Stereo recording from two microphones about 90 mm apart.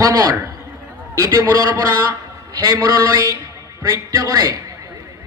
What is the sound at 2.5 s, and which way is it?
A man's voice, 40° right (ahead or behind).